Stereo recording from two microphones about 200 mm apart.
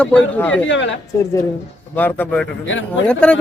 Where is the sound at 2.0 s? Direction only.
10° left (ahead or behind).